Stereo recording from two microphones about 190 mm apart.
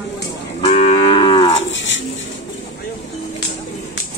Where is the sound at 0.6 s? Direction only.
30° left (ahead or behind).